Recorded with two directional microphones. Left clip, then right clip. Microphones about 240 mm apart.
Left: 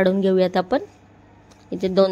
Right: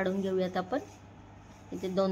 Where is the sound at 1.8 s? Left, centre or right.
Left.